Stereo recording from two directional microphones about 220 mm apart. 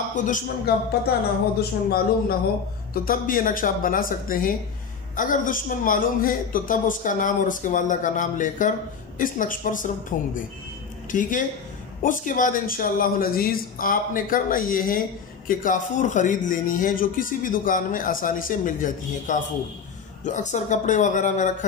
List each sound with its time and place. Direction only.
0.1 s a man's voice: 35° left (ahead or behind)